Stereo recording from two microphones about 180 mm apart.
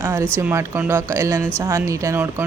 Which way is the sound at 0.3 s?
10° right (ahead or behind).